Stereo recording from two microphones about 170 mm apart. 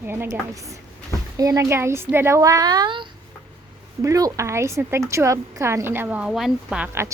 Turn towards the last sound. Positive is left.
turn(degrees=-5)  # may be behind; listen again after turning